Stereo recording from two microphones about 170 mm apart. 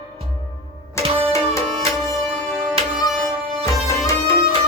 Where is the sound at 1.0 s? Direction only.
15° left (ahead or behind).